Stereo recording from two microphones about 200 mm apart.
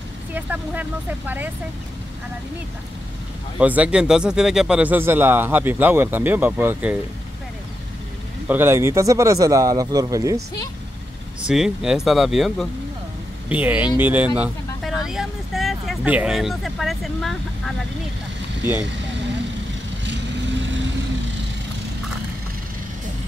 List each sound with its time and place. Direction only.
0.3 s speech: 10° right (ahead or behind)
3.5 s speech: 5° right (ahead or behind)
8.5 s speech: 10° right (ahead or behind)
11.4 s speech: 5° right (ahead or behind)